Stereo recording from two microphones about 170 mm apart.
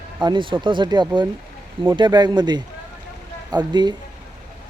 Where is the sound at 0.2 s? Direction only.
25° right (ahead or behind).